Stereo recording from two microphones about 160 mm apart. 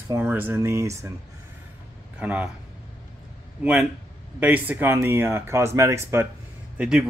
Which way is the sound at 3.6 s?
10° right (ahead or behind).